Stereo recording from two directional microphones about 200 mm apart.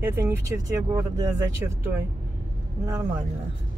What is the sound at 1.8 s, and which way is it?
Speech, 10° right (ahead or behind).